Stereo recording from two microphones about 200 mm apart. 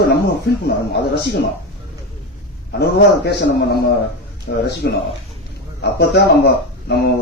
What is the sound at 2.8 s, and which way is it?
Speech, 55° left (ahead or behind).